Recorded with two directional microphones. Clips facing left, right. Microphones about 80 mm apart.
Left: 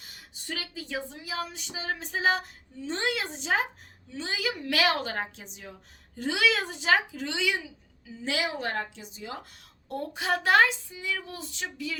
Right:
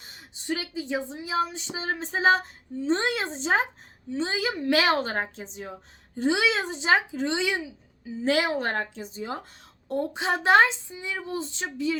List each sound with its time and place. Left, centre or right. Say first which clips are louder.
0.0 s a woman's voice: right 5 dB; right
8.2 s a woman's voice: right 6 dB; right
9.9 s speech: right 3 dB; right